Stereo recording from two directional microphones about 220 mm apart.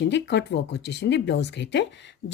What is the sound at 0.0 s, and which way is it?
Speech, 55° left (ahead or behind).